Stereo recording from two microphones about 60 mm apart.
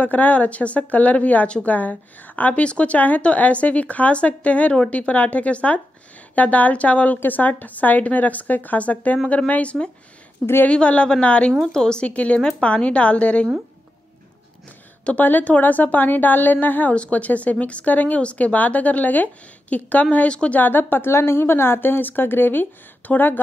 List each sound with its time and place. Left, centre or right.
0.0 s speech: left
10.4 s a woman's voice: left
10.7 s a woman's voice: centre
12.4 s a woman's voice: centre
12.6 s speech: centre
15.0 s speech: left